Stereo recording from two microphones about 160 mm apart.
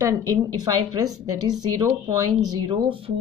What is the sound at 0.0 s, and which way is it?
A woman's voice, 20° right (ahead or behind).